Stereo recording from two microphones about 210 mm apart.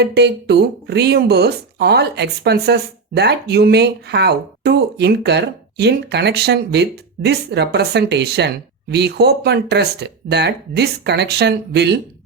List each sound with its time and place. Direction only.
0.0 s speech: 50° right (ahead or behind)